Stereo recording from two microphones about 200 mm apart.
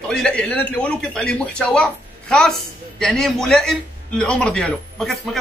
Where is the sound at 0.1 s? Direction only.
5° left (ahead or behind).